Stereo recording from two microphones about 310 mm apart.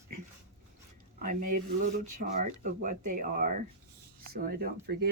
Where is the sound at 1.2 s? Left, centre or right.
Right.